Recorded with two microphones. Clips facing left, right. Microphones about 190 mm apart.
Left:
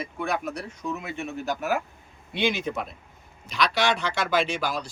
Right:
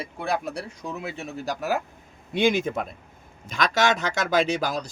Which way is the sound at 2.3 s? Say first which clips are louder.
Right 4 dB; 45° right (ahead or behind).